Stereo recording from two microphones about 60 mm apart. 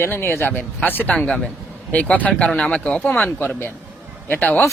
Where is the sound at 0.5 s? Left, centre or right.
Left.